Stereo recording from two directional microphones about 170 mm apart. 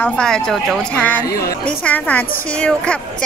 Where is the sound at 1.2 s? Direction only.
65° left (ahead or behind).